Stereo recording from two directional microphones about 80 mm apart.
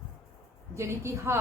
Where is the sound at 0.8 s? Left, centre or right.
Right.